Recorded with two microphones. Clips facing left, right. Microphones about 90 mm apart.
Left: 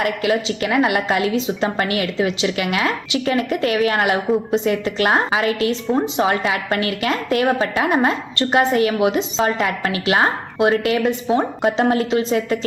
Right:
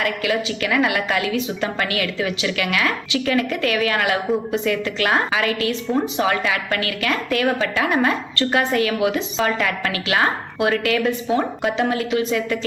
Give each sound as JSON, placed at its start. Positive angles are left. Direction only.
{"t": 0.0, "sound": "a woman's voice", "side_deg": 30}